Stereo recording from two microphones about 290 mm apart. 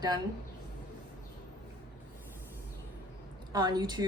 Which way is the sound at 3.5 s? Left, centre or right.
Centre.